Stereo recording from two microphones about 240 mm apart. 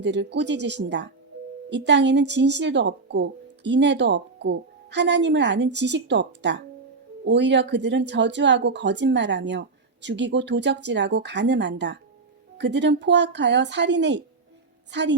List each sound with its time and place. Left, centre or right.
0.0 s a woman's voice: right